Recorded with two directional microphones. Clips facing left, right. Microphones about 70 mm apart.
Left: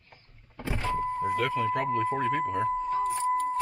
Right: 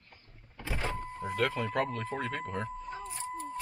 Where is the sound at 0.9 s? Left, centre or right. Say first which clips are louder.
Left 10 dB; left.